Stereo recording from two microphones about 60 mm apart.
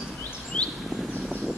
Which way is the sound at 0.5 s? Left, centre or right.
Centre.